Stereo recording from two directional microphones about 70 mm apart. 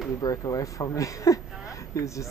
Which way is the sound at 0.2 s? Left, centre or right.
Left.